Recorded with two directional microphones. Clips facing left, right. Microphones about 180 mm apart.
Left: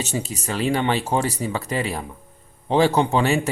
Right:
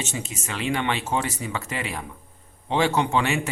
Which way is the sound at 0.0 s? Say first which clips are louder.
Left 5 dB; 35° left (ahead or behind).